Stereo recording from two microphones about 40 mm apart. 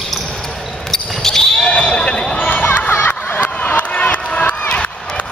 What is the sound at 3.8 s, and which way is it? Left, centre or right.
Crowd, left.